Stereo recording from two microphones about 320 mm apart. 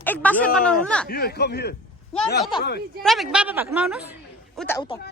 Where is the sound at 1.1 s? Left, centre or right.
Left.